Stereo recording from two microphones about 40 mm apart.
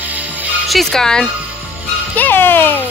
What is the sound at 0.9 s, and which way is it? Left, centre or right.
Speech, centre.